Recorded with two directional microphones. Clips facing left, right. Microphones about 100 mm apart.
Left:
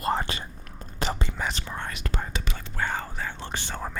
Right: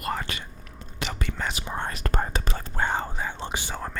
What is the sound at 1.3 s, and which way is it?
Whispering, 5° left (ahead or behind).